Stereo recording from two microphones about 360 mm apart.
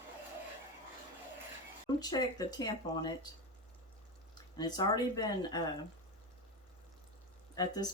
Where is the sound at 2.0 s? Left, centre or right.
Centre.